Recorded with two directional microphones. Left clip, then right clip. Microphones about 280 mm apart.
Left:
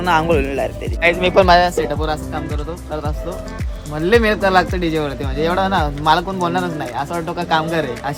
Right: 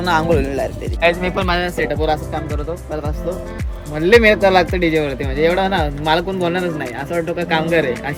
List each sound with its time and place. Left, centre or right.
0.0 s speech: centre
1.4 s speech: left
4.0 s speech: centre
4.8 s speech: left